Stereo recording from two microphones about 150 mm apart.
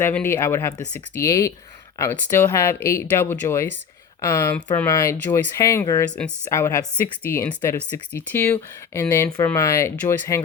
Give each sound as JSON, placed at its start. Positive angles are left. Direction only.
{"t": 0.0, "sound": "speech", "side_deg": 15}
{"t": 4.5, "sound": "speech", "side_deg": 10}
{"t": 4.9, "sound": "speech", "side_deg": 20}